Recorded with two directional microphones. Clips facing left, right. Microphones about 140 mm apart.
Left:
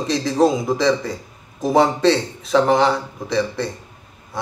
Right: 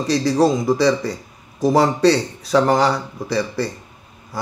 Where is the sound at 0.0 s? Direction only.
Centre (ahead or behind).